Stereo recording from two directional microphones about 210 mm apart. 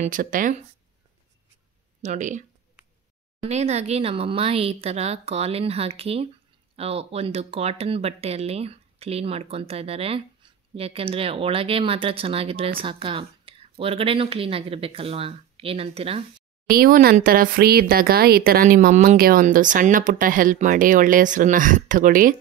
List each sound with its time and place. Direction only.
0.0 s speech: 40° right (ahead or behind)
2.0 s speech: 35° right (ahead or behind)
3.4 s speech: 30° right (ahead or behind)
16.6 s speech: 45° right (ahead or behind)